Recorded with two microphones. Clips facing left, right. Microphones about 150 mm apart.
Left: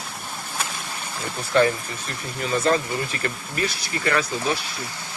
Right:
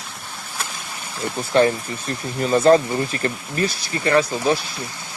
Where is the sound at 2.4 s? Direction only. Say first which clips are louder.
Right 7 dB; 35° right (ahead or behind).